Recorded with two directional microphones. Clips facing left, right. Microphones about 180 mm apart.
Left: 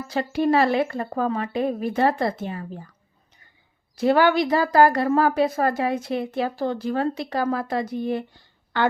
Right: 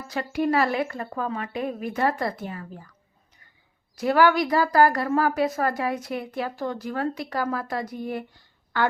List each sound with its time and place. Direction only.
0.1 s speech: 30° left (ahead or behind)
3.9 s speech: 25° left (ahead or behind)